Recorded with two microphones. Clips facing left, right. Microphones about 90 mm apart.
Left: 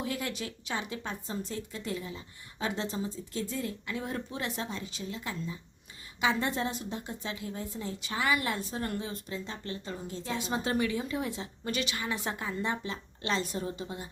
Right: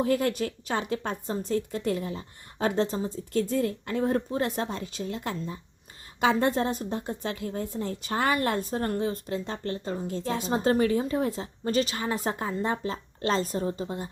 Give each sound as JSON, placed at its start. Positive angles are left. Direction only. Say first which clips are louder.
{"t": 0.0, "sound": "a woman's voice", "louder": "right 10 dB", "side_deg": -45}